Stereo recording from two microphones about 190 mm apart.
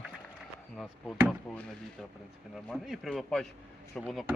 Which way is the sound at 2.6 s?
Centre (ahead or behind).